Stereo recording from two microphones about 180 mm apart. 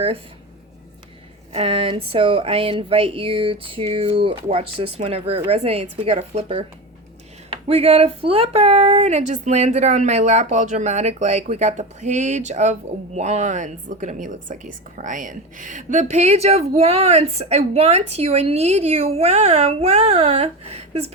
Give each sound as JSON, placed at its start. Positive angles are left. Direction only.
{"t": 1.5, "sound": "speech", "side_deg": -30}
{"t": 7.7, "sound": "speech", "side_deg": -35}